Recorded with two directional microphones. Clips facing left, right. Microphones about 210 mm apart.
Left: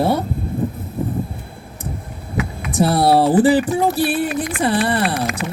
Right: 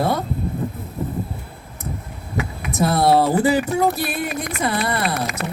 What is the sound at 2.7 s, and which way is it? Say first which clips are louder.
Speech: left 2 dB; 30° left (ahead or behind).